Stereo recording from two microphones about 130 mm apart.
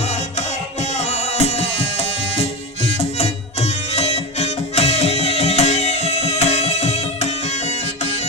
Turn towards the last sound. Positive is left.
turn(degrees=60)  # may be behind; listen again after turning